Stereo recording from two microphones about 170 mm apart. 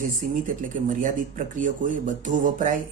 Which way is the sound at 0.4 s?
50° right (ahead or behind).